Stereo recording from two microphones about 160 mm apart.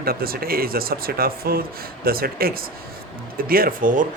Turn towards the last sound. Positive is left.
turn(degrees=-55)  # may be behind; listen again after turning